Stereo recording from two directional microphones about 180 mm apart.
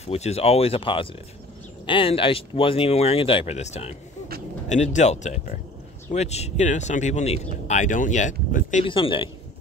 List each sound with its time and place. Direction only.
0.0 s speech: 35° left (ahead or behind)
8.8 s speech: 30° left (ahead or behind)